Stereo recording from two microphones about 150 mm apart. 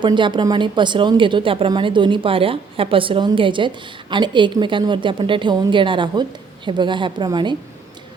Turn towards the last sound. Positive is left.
turn(degrees=-30)  # may be behind; listen again after turning